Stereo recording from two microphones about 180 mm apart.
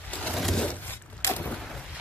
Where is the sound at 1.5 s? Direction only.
Centre (ahead or behind).